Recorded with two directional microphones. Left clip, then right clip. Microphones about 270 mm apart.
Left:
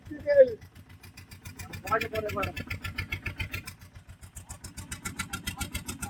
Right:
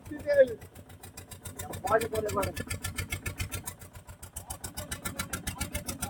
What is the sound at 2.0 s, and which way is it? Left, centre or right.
Vehicle, centre.